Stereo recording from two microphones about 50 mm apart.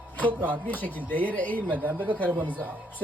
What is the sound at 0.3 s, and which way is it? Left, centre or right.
Speech, left.